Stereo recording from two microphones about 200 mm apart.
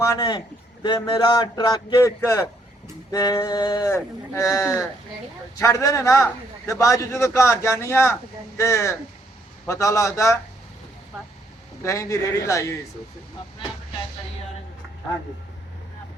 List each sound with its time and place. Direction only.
0.0 s a man's voice: 20° left (ahead or behind)
11.8 s a man's voice: 15° left (ahead or behind)